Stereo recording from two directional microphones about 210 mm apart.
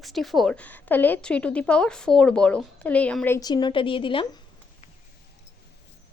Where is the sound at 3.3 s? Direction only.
20° left (ahead or behind).